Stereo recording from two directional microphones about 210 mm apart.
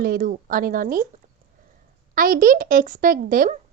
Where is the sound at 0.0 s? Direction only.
45° right (ahead or behind).